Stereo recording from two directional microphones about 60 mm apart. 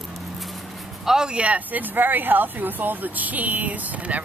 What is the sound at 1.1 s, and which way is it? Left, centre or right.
A woman's voice, centre.